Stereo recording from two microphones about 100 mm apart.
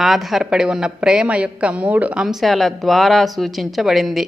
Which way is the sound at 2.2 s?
Centre (ahead or behind).